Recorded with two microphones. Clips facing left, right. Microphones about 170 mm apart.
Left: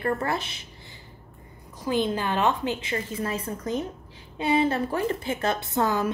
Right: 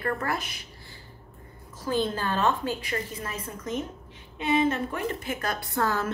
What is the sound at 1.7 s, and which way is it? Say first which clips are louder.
Speech: left 2 dB; 15° left (ahead or behind).